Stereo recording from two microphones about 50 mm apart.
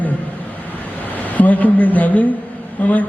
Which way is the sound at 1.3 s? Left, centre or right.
Left.